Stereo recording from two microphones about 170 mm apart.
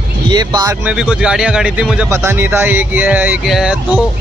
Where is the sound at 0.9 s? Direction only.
5° right (ahead or behind).